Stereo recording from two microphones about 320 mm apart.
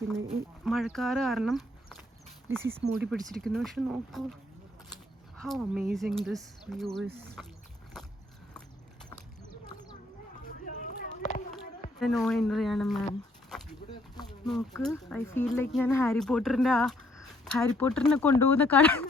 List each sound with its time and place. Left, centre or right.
0.3 s speech: centre
5.4 s speech: centre
7.4 s a sound: centre
11.0 s a sound: left
11.9 s speech: centre
14.4 s speech: centre